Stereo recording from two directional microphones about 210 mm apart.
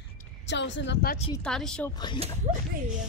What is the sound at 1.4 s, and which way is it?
Speech, 5° left (ahead or behind).